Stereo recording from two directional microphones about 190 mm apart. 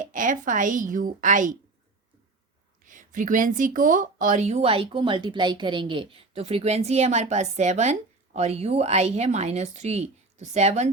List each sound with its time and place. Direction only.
0.0 s a woman's voice: 45° right (ahead or behind)
2.8 s speech: 45° right (ahead or behind)